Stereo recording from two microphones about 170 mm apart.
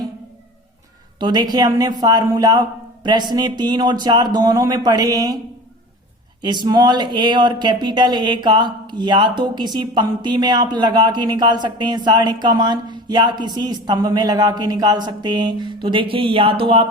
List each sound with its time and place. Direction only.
1.2 s speech: 25° right (ahead or behind)
6.4 s speech: 25° right (ahead or behind)